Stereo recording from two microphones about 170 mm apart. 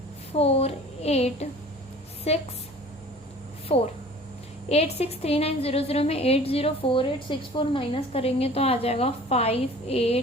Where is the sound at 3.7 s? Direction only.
35° left (ahead or behind).